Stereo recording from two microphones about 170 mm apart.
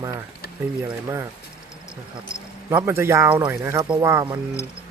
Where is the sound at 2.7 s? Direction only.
15° right (ahead or behind).